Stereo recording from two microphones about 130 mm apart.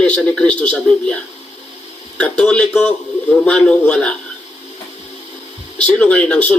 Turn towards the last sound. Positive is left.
turn(degrees=10)  # may be behind; listen again after turning